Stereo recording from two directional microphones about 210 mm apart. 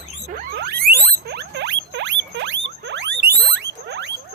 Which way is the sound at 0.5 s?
55° right (ahead or behind).